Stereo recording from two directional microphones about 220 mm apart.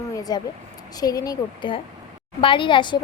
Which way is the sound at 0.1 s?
15° left (ahead or behind).